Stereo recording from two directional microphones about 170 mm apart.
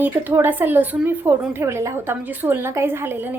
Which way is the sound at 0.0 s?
10° right (ahead or behind).